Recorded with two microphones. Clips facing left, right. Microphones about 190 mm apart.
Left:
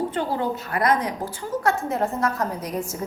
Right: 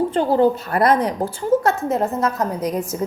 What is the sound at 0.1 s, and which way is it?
A woman's voice, 30° right (ahead or behind).